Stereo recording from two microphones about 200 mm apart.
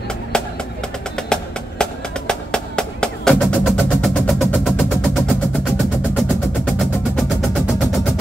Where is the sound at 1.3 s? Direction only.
5° left (ahead or behind).